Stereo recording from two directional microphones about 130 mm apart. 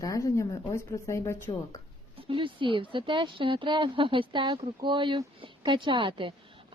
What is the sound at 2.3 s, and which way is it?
Speech, 40° right (ahead or behind).